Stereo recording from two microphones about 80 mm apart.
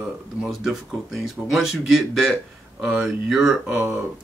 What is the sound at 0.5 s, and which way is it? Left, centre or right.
Speech, centre.